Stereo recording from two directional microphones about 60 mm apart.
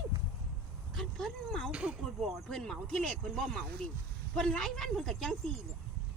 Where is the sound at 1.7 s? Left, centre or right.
Right.